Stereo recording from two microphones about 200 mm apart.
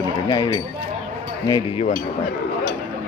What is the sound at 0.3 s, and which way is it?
Speech, 20° left (ahead or behind).